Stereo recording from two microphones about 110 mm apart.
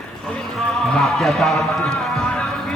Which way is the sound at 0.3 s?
5° left (ahead or behind).